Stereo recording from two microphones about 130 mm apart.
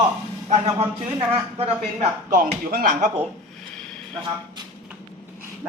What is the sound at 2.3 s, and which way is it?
Speech, 90° right.